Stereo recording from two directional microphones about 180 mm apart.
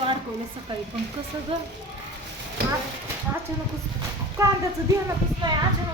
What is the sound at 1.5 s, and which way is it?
Speech, 30° right (ahead or behind).